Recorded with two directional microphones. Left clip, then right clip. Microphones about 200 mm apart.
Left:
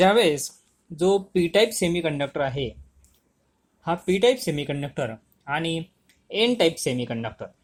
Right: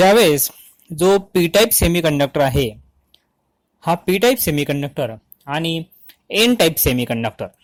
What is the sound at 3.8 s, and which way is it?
Speech, 45° right (ahead or behind).